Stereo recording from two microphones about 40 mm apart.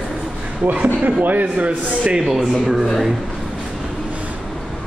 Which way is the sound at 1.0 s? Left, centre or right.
Right.